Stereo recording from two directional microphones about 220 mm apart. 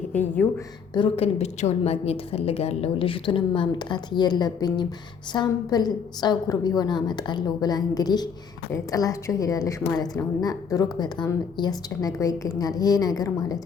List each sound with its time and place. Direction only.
0.1 s a woman's voice: 10° left (ahead or behind)
0.9 s a woman's voice: 25° left (ahead or behind)